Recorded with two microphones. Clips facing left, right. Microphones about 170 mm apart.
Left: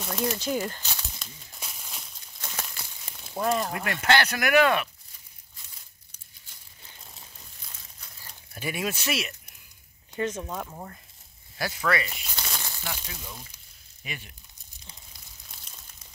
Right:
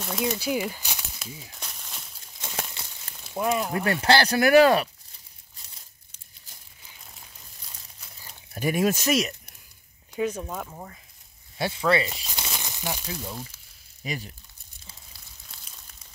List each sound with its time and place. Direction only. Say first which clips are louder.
0.0 s speech: right 1 dB; centre (ahead or behind)
1.6 s a sound: even; 5° left (ahead or behind)
2.4 s a sound: right 3 dB; 25° right (ahead or behind)
3.3 s speech: right 1 dB; 5° right (ahead or behind)
3.7 s speech: right 3 dB; 30° right (ahead or behind)
8.5 s speech: right 8 dB; 45° right (ahead or behind)
10.1 s speech: right 2 dB; 10° right (ahead or behind)
11.5 s speech: right 4 dB; 25° right (ahead or behind)
12.5 s crumpling: right 6 dB; 15° right (ahead or behind)
14.0 s speech: right 7 dB; 35° right (ahead or behind)